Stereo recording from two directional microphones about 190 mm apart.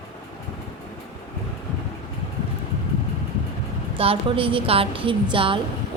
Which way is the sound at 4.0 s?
30° right (ahead or behind).